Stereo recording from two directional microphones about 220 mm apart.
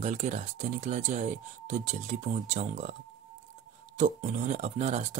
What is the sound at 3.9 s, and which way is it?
Speech, 35° right (ahead or behind).